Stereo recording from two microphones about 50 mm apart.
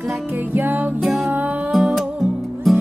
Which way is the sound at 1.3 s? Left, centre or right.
Right.